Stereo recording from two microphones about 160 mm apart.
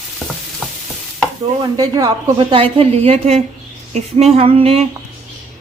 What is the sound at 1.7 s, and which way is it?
A woman's voice, 25° right (ahead or behind).